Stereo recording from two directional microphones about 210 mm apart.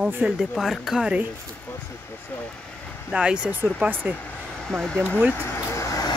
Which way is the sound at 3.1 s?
5° right (ahead or behind).